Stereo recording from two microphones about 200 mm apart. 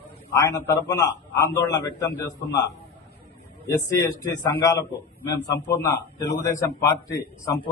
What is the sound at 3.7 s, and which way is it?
A man's voice, 15° left (ahead or behind).